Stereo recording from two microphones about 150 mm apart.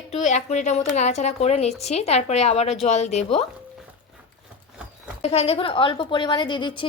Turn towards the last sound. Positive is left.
turn(degrees=35)  # may be behind; listen again after turning